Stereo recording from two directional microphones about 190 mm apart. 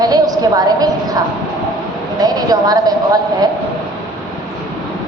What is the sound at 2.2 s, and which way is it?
A woman's voice, 20° right (ahead or behind).